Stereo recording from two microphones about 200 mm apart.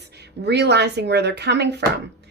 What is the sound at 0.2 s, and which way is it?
A woman's voice, 55° right (ahead or behind).